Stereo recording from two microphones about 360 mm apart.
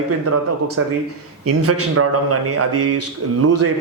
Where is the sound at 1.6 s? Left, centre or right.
Right.